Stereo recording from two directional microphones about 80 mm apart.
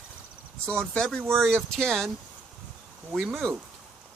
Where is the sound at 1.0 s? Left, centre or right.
Centre.